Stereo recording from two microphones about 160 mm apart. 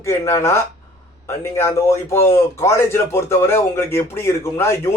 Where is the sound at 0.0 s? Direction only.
15° left (ahead or behind).